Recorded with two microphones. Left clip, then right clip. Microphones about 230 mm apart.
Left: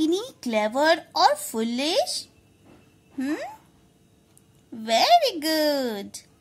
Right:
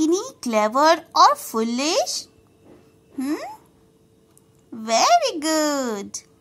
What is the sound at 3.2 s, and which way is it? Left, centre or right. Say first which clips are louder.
Speech: right 2 dB; centre.